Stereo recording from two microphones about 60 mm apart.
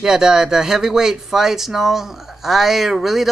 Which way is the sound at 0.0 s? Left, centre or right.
Centre.